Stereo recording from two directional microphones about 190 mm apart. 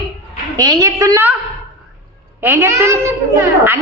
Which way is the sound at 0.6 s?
20° right (ahead or behind).